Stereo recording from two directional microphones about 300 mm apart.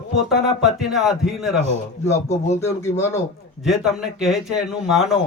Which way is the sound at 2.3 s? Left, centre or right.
Left.